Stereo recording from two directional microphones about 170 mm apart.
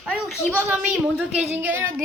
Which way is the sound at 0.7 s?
10° right (ahead or behind).